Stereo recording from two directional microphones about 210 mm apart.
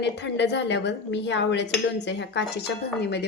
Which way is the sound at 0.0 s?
55° left (ahead or behind).